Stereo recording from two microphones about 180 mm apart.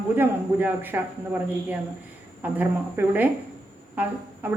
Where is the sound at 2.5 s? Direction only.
10° right (ahead or behind).